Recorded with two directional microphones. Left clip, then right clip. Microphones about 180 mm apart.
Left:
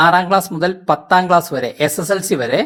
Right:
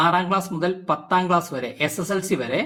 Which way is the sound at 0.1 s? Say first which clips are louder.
Left 8 dB; 50° left (ahead or behind).